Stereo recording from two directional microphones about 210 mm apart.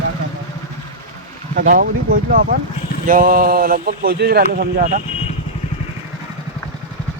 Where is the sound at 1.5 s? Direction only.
40° right (ahead or behind).